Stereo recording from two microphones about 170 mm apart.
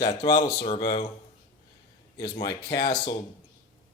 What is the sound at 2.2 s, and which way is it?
Speech, 25° left (ahead or behind).